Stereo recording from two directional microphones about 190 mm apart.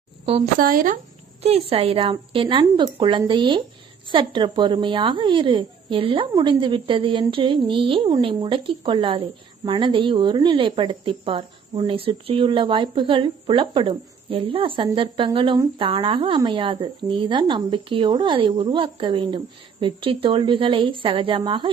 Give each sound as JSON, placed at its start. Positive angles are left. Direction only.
{"t": 0.6, "sound": "speech", "side_deg": -45}
{"t": 1.4, "sound": "speech", "side_deg": -35}